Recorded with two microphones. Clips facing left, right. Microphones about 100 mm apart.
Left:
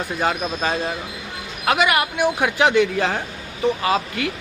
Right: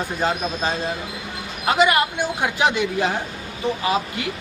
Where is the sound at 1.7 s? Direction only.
25° right (ahead or behind).